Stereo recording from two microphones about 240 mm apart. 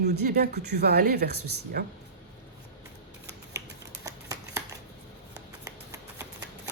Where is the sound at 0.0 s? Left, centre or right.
Right.